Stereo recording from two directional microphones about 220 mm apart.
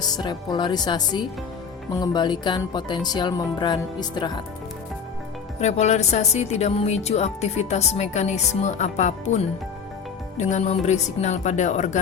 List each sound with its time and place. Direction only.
0.0 s speech: 20° left (ahead or behind)
5.5 s speech: 30° left (ahead or behind)